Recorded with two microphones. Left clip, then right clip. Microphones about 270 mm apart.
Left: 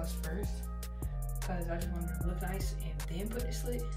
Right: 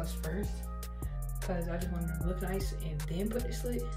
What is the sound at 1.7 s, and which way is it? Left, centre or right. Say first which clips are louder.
Music: right 2 dB; centre.